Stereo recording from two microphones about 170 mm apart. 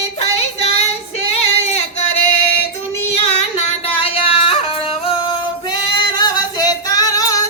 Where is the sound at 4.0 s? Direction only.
35° left (ahead or behind).